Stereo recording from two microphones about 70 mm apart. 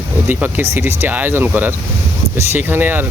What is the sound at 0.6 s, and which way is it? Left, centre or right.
Speech, right.